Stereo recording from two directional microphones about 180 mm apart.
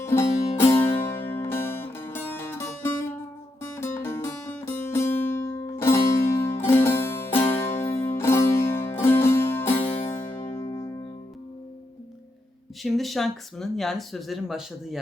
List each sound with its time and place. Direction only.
0.0 s music: 15° left (ahead or behind)
9.8 s music: 30° left (ahead or behind)
12.8 s speech: centre (ahead or behind)